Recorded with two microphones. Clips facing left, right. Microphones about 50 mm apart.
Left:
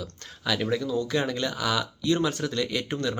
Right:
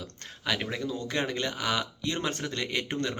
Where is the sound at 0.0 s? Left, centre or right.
Right.